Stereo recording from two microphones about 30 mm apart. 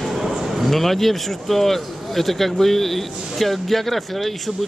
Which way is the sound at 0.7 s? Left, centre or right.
Centre.